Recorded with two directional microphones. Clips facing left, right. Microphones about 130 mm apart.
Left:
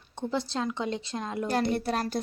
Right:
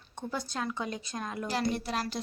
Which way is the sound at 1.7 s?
50° left (ahead or behind).